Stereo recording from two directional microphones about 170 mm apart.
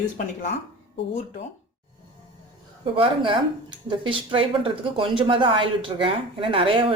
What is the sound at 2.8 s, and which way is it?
A woman's voice, 30° right (ahead or behind).